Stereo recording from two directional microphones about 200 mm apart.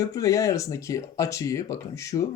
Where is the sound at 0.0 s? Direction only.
15° left (ahead or behind).